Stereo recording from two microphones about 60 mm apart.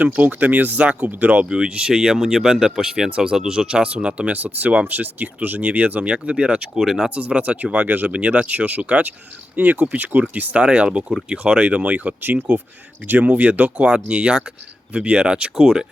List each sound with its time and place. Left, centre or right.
0.0 s speech: right
1.5 s speech: centre
6.7 s speech: centre
7.1 s speech: right
10.6 s speech: centre
12.4 s speech: right
13.1 s speech: right; by 15.9 s centre